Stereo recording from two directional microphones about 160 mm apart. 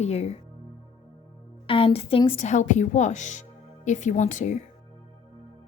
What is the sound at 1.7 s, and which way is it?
Speech, 35° left (ahead or behind).